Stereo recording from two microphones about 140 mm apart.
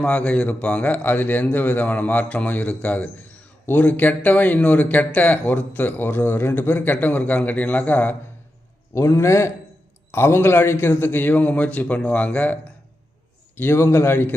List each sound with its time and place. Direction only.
0.0 s a man's voice: 10° left (ahead or behind)